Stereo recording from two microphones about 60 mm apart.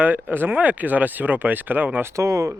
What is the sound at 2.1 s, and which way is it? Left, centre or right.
Speech, right.